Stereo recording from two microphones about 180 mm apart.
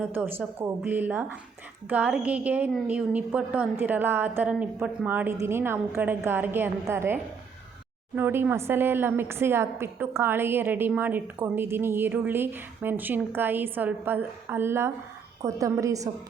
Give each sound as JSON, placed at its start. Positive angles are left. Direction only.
{"t": 0.1, "sound": "a woman's voice", "side_deg": -10}